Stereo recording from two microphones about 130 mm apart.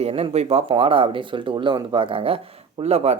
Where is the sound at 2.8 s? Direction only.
55° right (ahead or behind).